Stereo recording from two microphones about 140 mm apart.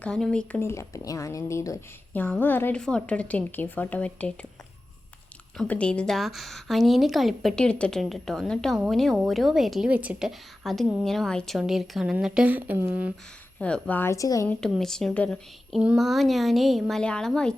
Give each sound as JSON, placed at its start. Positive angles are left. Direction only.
{"t": 0.0, "sound": "a woman's voice", "side_deg": 5}
{"t": 0.6, "sound": "a woman's voice", "side_deg": 20}
{"t": 5.5, "sound": "a woman's voice", "side_deg": 10}
{"t": 13.6, "sound": "a woman's voice", "side_deg": 10}
{"t": 14.4, "sound": "a woman's voice", "side_deg": 5}
{"t": 15.8, "sound": "a woman's voice", "side_deg": -5}